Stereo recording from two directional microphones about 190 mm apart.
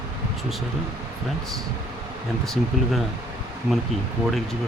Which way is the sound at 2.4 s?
Centre (ahead or behind).